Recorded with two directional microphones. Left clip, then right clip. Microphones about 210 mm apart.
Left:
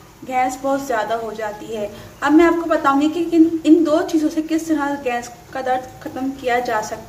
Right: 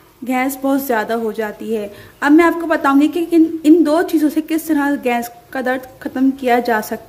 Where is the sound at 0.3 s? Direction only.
50° right (ahead or behind).